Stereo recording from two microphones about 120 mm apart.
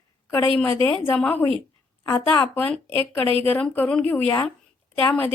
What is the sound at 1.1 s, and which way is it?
Speech, 15° left (ahead or behind).